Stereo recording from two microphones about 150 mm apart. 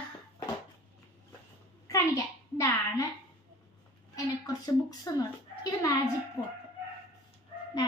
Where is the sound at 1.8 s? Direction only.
20° left (ahead or behind).